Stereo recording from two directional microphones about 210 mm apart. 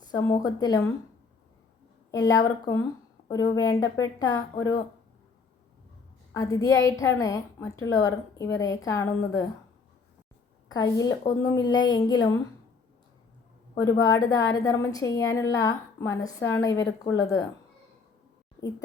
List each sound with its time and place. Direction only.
0.1 s a woman's voice: 20° left (ahead or behind)
2.0 s a woman's voice: 15° left (ahead or behind)
6.3 s a woman's voice: 15° left (ahead or behind)
10.7 s a woman's voice: 20° left (ahead or behind)
13.8 s a woman's voice: 15° left (ahead or behind)